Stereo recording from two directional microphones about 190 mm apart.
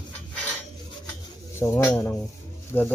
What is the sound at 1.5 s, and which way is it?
Speech, 15° left (ahead or behind).